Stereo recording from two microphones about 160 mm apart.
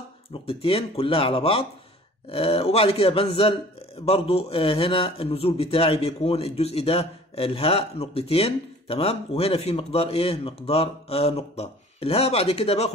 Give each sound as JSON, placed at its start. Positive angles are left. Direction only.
{"t": 0.3, "sound": "a man's voice", "side_deg": 35}